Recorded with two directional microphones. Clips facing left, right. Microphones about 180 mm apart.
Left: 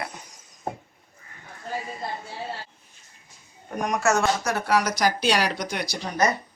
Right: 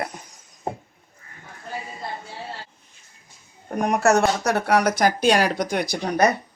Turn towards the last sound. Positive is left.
turn(degrees=-60)  # may be behind; listen again after turning